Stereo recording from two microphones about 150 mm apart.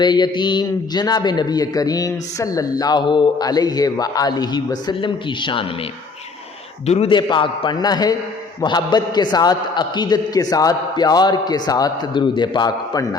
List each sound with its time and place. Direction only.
0.0 s a man's voice: 30° left (ahead or behind)
6.8 s a man's voice: 45° left (ahead or behind)
7.1 s a man's voice: 30° left (ahead or behind)